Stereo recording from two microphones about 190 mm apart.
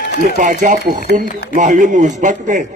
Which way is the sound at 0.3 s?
45° right (ahead or behind).